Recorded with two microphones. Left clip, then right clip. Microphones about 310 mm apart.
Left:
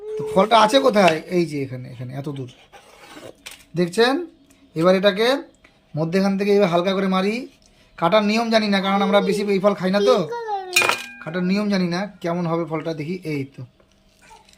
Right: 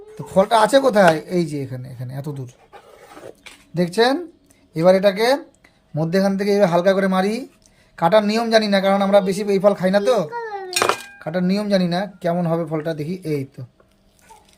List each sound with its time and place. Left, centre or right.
0.3 s speech: centre
3.8 s a man's voice: centre
10.2 s chink: left
11.2 s a man's voice: centre